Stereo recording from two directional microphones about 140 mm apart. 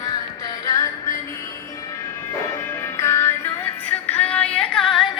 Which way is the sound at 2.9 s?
20° left (ahead or behind).